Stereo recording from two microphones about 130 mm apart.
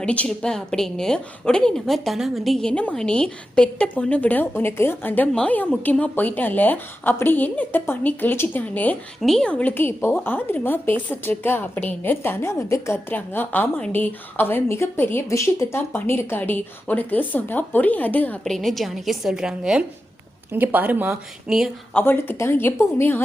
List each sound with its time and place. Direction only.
0.0 s a woman's voice: 10° left (ahead or behind)
18.5 s a woman's voice: centre (ahead or behind)
21.9 s a woman's voice: 15° left (ahead or behind)